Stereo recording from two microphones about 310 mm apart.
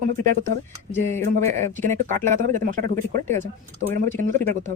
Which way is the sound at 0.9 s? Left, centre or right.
Centre.